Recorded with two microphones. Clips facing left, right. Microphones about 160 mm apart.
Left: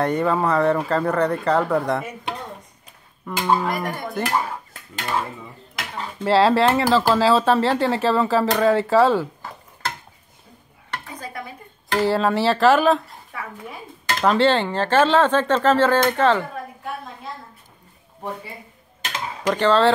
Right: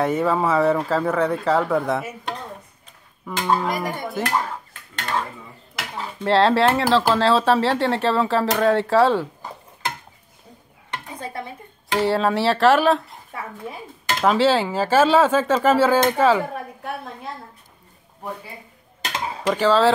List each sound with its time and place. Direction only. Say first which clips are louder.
0.0 s speech: even; centre (ahead or behind)
3.3 s dishes: left 1 dB; 5° left (ahead or behind)
5.8 s speech: even; centre (ahead or behind)
10.9 s music: right 1 dB; 20° right (ahead or behind)
12.0 s speech: even; centre (ahead or behind)
14.0 s speech: even; 5° right (ahead or behind)
19.4 s speech: even; centre (ahead or behind)